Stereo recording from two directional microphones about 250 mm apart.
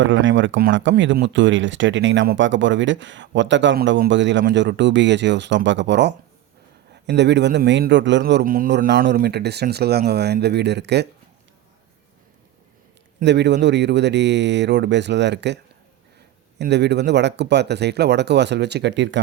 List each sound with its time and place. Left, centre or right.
0.0 s a man's voice: right
13.1 s speech: right
16.6 s speech: right